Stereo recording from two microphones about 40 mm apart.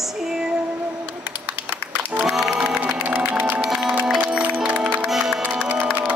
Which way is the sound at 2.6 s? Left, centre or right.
Right.